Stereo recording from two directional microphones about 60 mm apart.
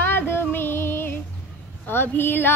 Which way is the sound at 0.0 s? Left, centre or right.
Left.